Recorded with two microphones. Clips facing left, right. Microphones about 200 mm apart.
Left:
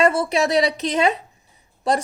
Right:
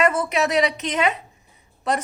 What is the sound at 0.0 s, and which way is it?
A woman's voice, 30° left (ahead or behind).